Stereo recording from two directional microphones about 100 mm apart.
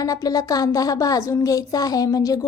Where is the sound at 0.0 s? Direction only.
35° left (ahead or behind).